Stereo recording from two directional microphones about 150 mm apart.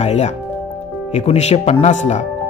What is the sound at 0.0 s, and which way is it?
Speech, 45° left (ahead or behind).